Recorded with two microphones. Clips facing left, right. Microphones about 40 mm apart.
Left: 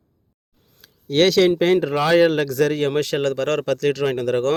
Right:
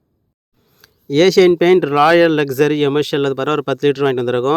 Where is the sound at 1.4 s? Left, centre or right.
Right.